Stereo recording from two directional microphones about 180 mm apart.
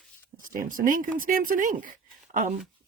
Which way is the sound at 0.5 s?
50° right (ahead or behind).